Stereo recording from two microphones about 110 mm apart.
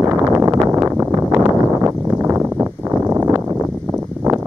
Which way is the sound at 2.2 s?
25° right (ahead or behind).